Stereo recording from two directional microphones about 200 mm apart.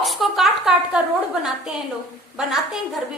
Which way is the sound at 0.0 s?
Centre (ahead or behind).